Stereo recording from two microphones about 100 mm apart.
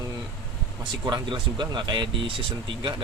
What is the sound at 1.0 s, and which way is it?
Speech, 50° right (ahead or behind).